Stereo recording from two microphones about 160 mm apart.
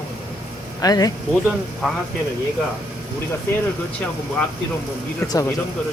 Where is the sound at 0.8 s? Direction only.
25° left (ahead or behind).